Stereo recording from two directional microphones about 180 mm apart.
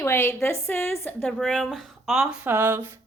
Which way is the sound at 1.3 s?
Centre (ahead or behind).